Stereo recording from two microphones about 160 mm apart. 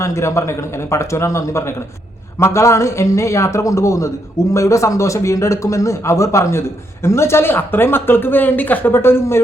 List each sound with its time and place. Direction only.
0.0 s a man's voice: 15° left (ahead or behind)